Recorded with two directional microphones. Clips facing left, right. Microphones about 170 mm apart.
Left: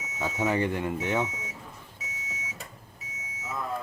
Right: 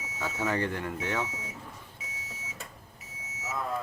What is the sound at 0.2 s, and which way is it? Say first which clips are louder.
Speech: left 3 dB; 10° left (ahead or behind).